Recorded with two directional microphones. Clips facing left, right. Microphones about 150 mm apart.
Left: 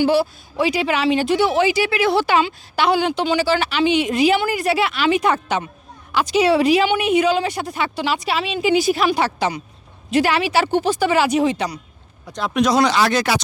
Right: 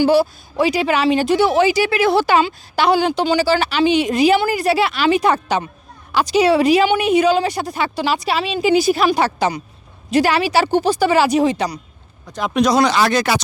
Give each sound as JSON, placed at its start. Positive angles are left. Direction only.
{"t": 0.0, "sound": "speech", "side_deg": -40}